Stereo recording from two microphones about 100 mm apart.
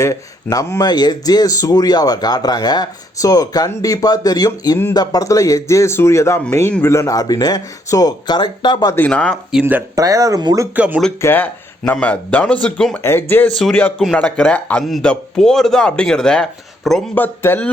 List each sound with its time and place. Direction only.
0.0 s speech: 30° left (ahead or behind)
0.9 s speech: 45° left (ahead or behind); by 6.9 s 20° left (ahead or behind)
6.9 s speech: 35° left (ahead or behind); by 8.9 s 50° left (ahead or behind)
9.0 s a man's voice: 10° left (ahead or behind)
9.9 s speech: 35° right (ahead or behind)
10.8 s speech: 15° right (ahead or behind)
11.2 s a man's voice: 20° left (ahead or behind)
13.0 s speech: 25° left (ahead or behind)
13.5 s a man's voice: centre (ahead or behind)
17.2 s speech: 20° left (ahead or behind)